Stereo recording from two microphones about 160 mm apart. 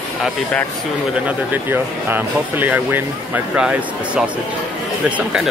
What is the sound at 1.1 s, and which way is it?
Speech, 10° right (ahead or behind).